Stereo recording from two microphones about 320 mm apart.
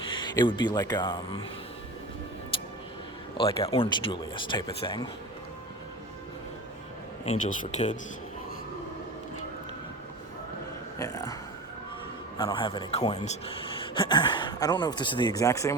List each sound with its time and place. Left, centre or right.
0.1 s speech: centre
2.5 s music: centre
3.3 s speech: centre
7.3 s speech: left
10.9 s speech: centre
12.4 s speech: centre